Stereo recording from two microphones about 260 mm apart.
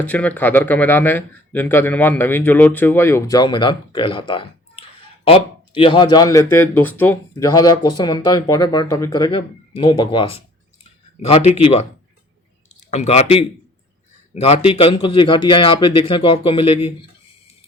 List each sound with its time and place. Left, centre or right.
0.0 s speech: centre; by 11.9 s left
12.9 s speech: left